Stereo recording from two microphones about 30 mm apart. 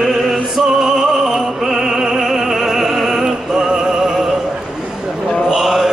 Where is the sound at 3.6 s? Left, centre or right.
Right.